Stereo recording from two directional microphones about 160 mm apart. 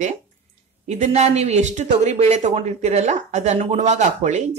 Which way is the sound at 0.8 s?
45° right (ahead or behind).